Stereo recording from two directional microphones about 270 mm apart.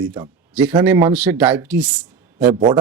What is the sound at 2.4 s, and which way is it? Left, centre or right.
Speech, centre.